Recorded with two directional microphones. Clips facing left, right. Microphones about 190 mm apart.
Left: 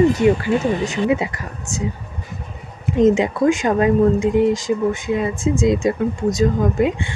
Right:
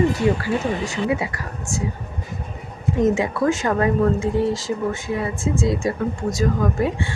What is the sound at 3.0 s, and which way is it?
Speech, 20° left (ahead or behind).